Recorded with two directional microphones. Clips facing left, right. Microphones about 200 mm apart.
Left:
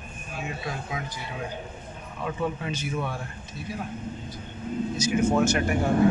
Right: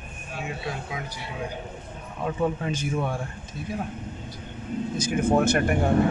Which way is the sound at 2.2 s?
45° right (ahead or behind).